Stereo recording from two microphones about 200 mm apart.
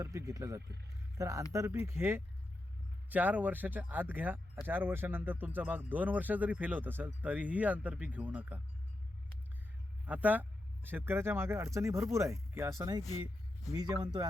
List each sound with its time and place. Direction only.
0.0 s speech: 15° right (ahead or behind)
10.1 s speech: 10° right (ahead or behind)